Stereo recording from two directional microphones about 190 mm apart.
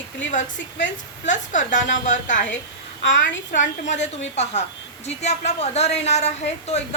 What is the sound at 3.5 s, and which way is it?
Speech, 40° left (ahead or behind).